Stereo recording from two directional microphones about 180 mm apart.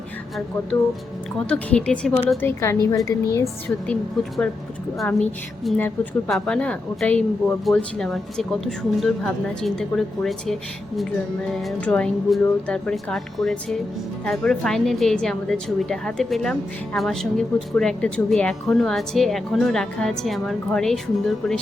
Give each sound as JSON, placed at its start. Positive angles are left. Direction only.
{"t": 1.5, "sound": "a woman's voice", "side_deg": 5}
{"t": 2.4, "sound": "a woman's voice", "side_deg": 15}
{"t": 3.8, "sound": "a woman's voice", "side_deg": 5}